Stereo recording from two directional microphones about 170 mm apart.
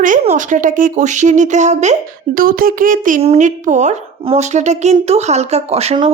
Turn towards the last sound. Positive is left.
turn(degrees=-35)  # may be behind; listen again after turning